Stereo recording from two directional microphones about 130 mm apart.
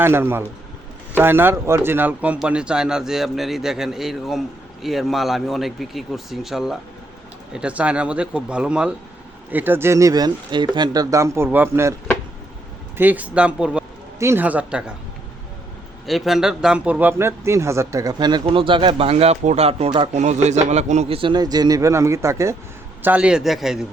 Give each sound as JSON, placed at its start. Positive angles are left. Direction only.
{"t": 0.0, "sound": "a man's voice", "side_deg": -15}
{"t": 13.0, "sound": "a man's voice", "side_deg": -15}
{"t": 16.0, "sound": "a man's voice", "side_deg": 0}
{"t": 23.0, "sound": "a man's voice", "side_deg": -10}